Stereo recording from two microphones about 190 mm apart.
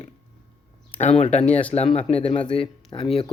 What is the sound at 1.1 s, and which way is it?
Speech, 35° left (ahead or behind).